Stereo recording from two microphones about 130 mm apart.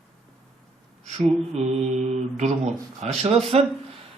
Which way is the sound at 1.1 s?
55° right (ahead or behind).